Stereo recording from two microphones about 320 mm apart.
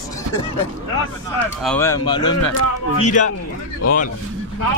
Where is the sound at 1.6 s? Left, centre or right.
Centre; by 3.3 s left.